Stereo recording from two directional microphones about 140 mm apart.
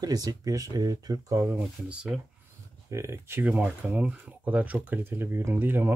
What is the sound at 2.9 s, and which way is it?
Speech, 20° right (ahead or behind).